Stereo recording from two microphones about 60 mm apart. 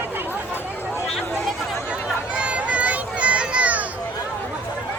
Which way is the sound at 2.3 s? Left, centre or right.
Centre.